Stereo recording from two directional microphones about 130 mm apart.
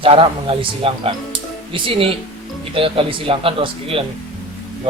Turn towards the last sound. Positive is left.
turn(degrees=-45)  # may be behind; listen again after turning